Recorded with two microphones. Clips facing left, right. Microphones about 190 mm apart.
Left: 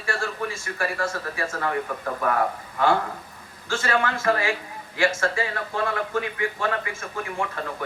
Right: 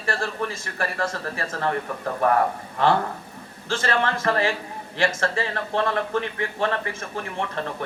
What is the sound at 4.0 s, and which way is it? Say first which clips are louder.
Speech: right 1 dB; 35° right (ahead or behind).